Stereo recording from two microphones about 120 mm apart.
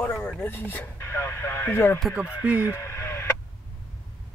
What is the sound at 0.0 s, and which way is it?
Speech, 15° left (ahead or behind).